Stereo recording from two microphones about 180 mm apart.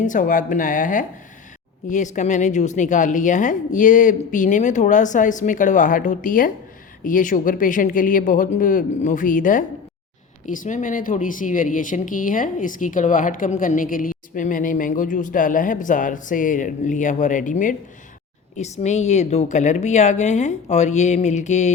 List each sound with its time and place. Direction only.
0.0 s a woman's voice: 45° left (ahead or behind)